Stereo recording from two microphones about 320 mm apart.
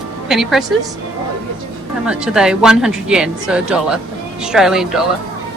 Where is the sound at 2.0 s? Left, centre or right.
Centre.